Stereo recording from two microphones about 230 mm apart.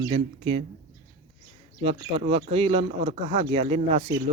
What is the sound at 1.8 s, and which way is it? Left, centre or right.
Speech, right.